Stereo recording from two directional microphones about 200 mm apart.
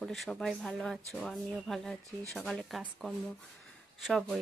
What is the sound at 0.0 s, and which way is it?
Speech, centre (ahead or behind).